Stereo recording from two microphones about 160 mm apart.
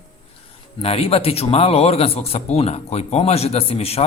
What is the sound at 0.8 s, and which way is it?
Speech, 40° left (ahead or behind).